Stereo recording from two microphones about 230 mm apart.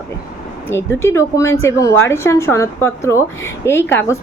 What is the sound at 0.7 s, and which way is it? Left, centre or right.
A woman's voice, centre.